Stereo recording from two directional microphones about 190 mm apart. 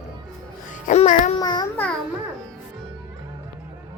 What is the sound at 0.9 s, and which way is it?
Music, 40° left (ahead or behind).